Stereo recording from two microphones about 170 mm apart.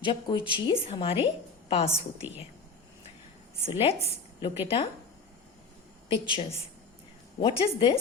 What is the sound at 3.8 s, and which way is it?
Speech, 35° left (ahead or behind).